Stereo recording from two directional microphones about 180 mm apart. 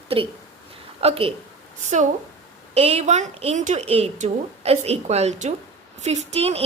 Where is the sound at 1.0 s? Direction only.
30° right (ahead or behind).